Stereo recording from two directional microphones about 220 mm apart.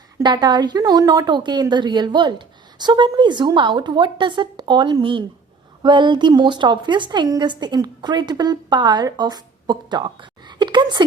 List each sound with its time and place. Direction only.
0.2 s a woman's voice: 20° right (ahead or behind)